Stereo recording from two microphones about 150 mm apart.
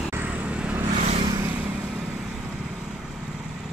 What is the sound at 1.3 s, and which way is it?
Vehicle, 20° right (ahead or behind).